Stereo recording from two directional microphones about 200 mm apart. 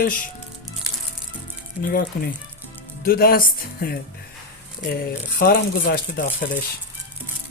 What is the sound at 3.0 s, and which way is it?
Speech, 50° left (ahead or behind).